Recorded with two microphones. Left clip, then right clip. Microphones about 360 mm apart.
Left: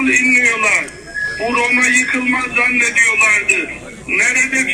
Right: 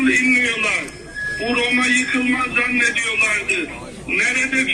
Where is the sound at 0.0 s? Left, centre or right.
Centre.